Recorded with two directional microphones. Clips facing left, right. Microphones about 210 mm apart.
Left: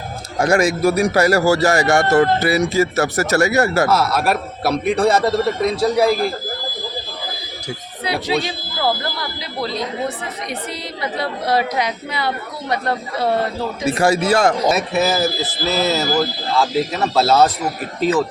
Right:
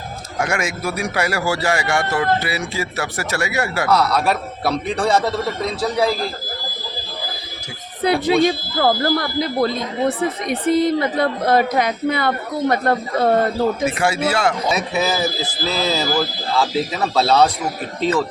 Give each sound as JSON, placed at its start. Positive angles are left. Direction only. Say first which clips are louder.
{"t": 0.3, "sound": "speech", "louder": "left 7 dB", "side_deg": 35}
{"t": 3.8, "sound": "a man's voice", "louder": "even", "side_deg": 5}
{"t": 8.0, "sound": "speech", "louder": "right 6 dB", "side_deg": -50}
{"t": 13.8, "sound": "speech", "louder": "left 3 dB", "side_deg": 40}
{"t": 14.7, "sound": "a man's voice", "louder": "left 2 dB", "side_deg": 0}